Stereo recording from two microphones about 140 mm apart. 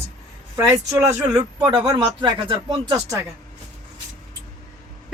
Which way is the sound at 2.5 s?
25° right (ahead or behind).